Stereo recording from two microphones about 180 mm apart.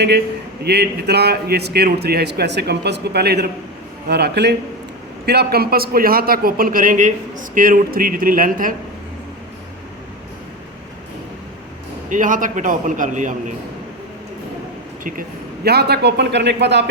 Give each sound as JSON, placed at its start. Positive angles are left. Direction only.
{"t": 0.6, "sound": "a man's voice", "side_deg": -65}
{"t": 12.0, "sound": "a man's voice", "side_deg": -45}
{"t": 15.6, "sound": "a man's voice", "side_deg": -65}